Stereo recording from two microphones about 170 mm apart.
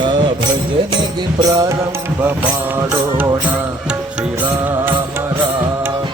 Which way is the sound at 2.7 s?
15° right (ahead or behind).